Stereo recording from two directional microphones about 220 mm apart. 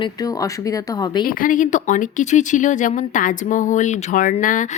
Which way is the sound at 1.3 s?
40° left (ahead or behind).